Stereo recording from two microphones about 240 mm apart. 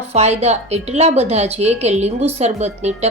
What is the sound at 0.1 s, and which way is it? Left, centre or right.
A woman's voice, right.